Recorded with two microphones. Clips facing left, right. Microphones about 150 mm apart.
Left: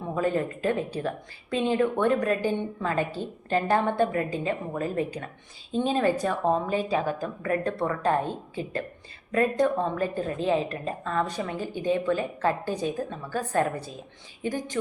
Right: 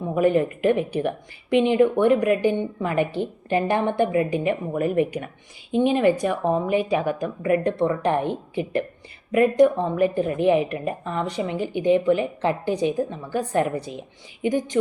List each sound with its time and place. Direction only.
0.1 s a woman's voice: 20° right (ahead or behind)
9.3 s a woman's voice: 15° right (ahead or behind)